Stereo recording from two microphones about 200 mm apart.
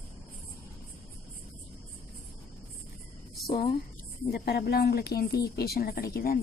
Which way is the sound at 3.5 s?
50° left (ahead or behind).